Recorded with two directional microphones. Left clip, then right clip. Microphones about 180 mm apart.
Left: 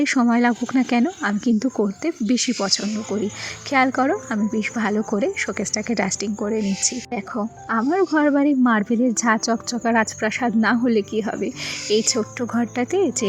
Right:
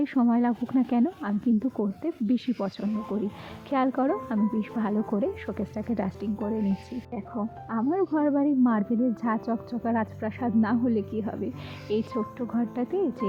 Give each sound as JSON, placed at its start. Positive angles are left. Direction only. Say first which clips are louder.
{"t": 0.0, "sound": "a woman's voice", "louder": "left 7 dB", "side_deg": 20}
{"t": 7.7, "sound": "a woman's voice", "louder": "left 7 dB", "side_deg": 25}